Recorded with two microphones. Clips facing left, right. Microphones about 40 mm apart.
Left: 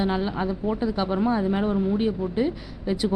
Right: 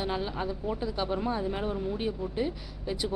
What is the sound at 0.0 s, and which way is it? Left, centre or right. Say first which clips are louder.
Speech: left 7 dB; left.